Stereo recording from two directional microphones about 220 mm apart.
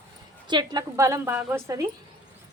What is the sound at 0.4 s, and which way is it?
A woman's voice, 20° right (ahead or behind).